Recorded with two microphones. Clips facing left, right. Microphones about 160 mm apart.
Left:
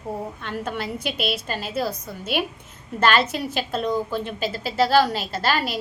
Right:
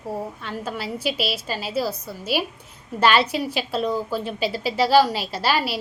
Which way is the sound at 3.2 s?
10° right (ahead or behind).